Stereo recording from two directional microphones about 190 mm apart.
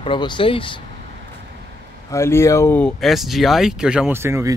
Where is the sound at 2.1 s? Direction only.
15° left (ahead or behind).